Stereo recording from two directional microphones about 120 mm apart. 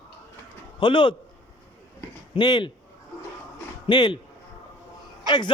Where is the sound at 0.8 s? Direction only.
45° left (ahead or behind).